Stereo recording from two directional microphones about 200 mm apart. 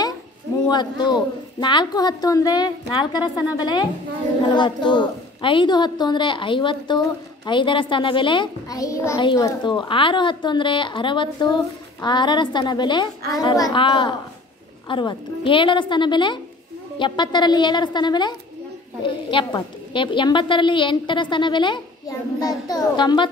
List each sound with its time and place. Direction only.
0.7 s a child's voice: 20° left (ahead or behind)